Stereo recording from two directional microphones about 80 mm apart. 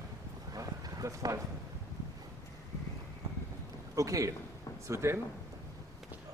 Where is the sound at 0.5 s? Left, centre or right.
Right.